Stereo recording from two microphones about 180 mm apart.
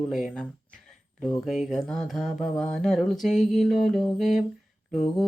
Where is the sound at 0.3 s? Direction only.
Centre (ahead or behind).